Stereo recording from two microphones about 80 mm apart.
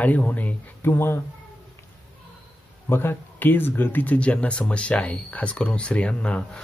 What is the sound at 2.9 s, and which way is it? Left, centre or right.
Speech, left.